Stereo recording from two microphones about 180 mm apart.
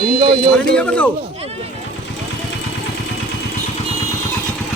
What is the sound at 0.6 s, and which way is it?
Speech, 5° left (ahead or behind).